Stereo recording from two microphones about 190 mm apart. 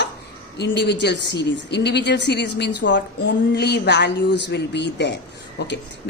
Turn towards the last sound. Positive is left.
turn(degrees=65)  # may be behind; listen again after turning